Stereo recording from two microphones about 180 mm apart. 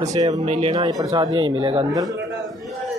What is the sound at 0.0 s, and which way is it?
Speech, 20° right (ahead or behind).